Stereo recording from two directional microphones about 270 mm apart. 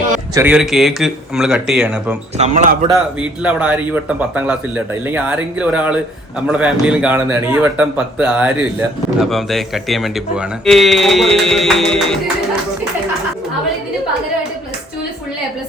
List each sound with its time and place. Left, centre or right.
0.3 s speech: centre
2.4 s a man's voice: right
2.9 s speech: centre